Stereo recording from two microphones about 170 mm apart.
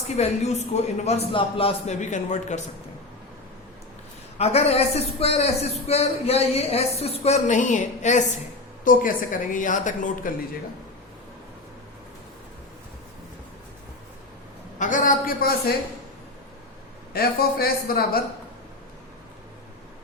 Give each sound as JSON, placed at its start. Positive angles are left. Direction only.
{"t": 0.2, "sound": "speech", "side_deg": 40}
{"t": 4.4, "sound": "a woman's voice", "side_deg": 40}
{"t": 14.8, "sound": "a man's voice", "side_deg": 50}
{"t": 17.1, "sound": "a man's voice", "side_deg": 65}